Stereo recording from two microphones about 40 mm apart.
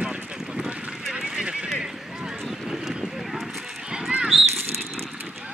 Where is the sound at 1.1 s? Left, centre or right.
Centre.